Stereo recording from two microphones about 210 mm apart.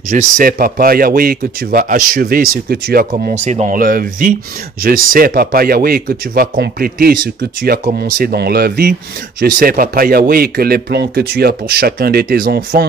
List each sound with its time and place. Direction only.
0.1 s speech: 40° right (ahead or behind)